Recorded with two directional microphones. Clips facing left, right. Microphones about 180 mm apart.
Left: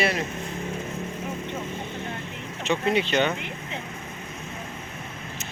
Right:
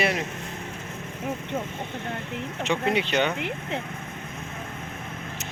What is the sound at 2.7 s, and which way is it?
Speech, 15° right (ahead or behind).